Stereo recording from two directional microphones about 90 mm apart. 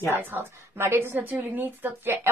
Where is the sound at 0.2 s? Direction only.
25° right (ahead or behind).